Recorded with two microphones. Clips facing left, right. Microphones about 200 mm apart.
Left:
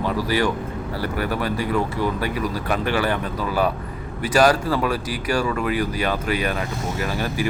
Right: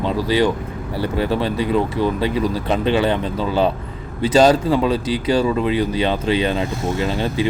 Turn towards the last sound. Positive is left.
turn(degrees=-25)  # may be behind; listen again after turning